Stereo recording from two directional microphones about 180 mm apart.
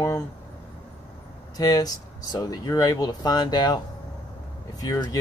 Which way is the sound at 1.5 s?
20° left (ahead or behind).